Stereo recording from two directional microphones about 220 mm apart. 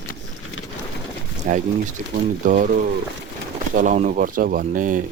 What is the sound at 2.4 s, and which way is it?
Speech, 35° right (ahead or behind).